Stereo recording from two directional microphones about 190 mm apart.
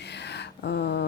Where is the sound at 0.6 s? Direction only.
60° left (ahead or behind).